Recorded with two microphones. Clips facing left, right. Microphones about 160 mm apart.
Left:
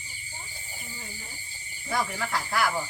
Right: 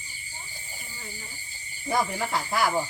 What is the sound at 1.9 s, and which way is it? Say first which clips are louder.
Speech: right 3 dB; 20° right (ahead or behind).